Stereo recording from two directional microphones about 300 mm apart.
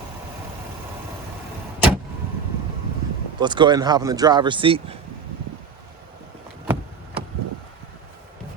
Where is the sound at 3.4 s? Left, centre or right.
Centre.